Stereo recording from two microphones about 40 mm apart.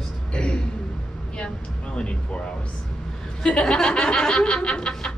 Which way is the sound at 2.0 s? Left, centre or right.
Left.